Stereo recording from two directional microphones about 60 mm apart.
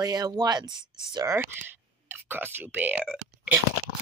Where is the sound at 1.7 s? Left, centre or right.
Right.